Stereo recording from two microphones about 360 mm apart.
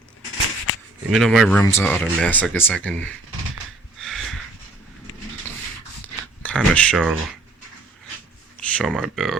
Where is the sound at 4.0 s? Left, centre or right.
Centre.